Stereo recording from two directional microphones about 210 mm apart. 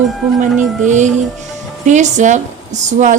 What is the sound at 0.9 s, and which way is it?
Music, 35° right (ahead or behind).